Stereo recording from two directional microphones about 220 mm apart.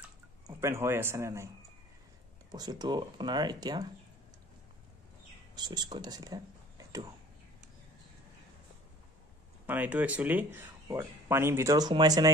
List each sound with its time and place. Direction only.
0.5 s speech: 10° right (ahead or behind)
2.5 s speech: 20° right (ahead or behind)
5.6 s speech: 20° right (ahead or behind)
9.7 s speech: 5° right (ahead or behind)